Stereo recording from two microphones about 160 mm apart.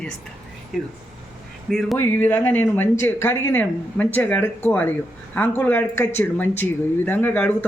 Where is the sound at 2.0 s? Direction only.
15° left (ahead or behind).